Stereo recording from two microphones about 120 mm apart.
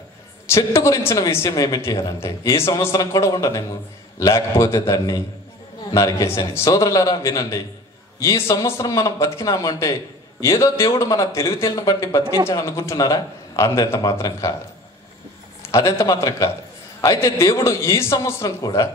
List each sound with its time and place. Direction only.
0.5 s a man's voice: 25° left (ahead or behind)
15.7 s a man's voice: 30° left (ahead or behind)